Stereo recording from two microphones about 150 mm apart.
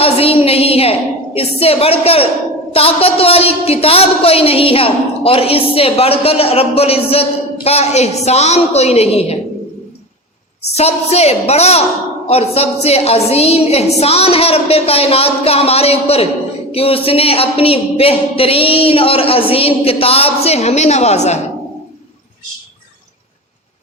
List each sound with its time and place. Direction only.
0.0 s a woman's voice: 40° left (ahead or behind)
10.7 s a woman's voice: 45° left (ahead or behind)